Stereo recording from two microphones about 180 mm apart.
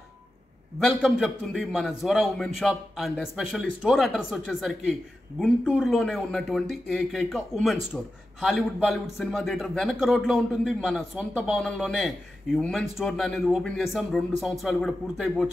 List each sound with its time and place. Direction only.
0.7 s a man's voice: centre (ahead or behind)